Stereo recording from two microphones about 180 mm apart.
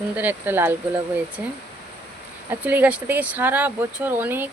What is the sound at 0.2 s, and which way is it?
Speech, 10° right (ahead or behind).